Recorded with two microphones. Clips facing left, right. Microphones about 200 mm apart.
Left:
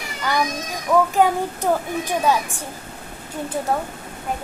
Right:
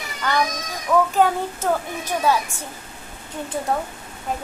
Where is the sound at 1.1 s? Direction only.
15° left (ahead or behind).